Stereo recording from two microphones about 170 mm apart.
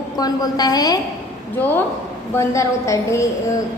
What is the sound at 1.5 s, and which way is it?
A woman's voice, 10° left (ahead or behind).